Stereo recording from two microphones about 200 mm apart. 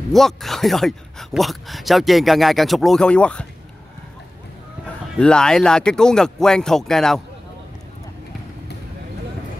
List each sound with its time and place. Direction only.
0.1 s speech: centre (ahead or behind)
5.2 s speech: 5° left (ahead or behind)